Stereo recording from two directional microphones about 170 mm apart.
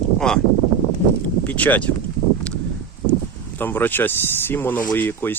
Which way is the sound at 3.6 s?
10° left (ahead or behind).